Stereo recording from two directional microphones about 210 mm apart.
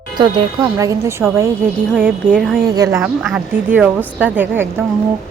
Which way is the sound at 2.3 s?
Centre (ahead or behind).